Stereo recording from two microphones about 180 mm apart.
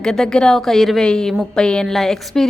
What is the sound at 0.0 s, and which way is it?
A woman's voice, 5° left (ahead or behind).